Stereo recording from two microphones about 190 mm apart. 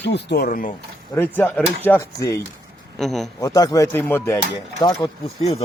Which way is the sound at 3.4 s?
20° left (ahead or behind).